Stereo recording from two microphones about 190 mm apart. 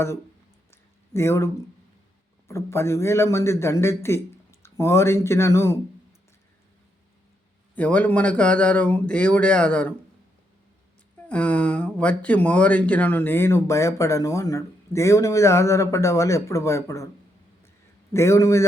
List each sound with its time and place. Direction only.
0.7 s a sound: 15° left (ahead or behind)
2.5 s speech: 15° left (ahead or behind)
7.8 s speech: 5° left (ahead or behind)
11.3 s speech: 5° left (ahead or behind)
18.1 s speech: 15° left (ahead or behind)